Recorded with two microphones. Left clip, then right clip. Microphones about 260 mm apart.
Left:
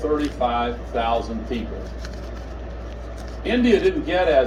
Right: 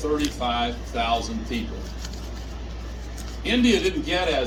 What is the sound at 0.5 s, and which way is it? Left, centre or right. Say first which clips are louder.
Speech: left 3 dB; right.